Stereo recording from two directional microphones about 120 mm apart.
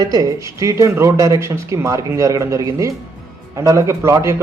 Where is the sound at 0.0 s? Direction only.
30° right (ahead or behind).